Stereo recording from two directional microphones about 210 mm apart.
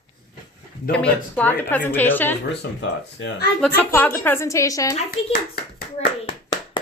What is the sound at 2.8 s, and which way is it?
Speech, 60° left (ahead or behind).